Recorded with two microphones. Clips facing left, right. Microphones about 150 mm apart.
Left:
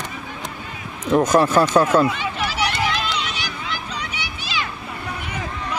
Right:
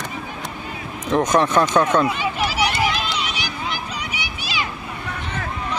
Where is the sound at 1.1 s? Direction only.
5° left (ahead or behind).